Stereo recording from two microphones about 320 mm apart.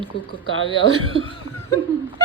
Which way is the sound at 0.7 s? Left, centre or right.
Centre.